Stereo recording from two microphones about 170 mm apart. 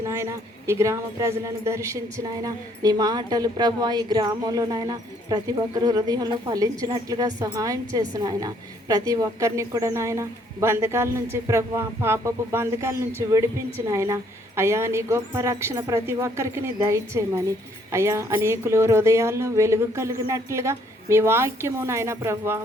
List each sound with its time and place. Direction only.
0.0 s a woman's voice: 15° right (ahead or behind)